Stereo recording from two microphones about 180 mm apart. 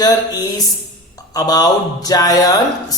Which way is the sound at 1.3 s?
20° left (ahead or behind).